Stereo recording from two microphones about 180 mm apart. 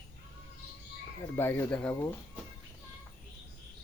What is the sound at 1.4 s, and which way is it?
Speech, 10° left (ahead or behind).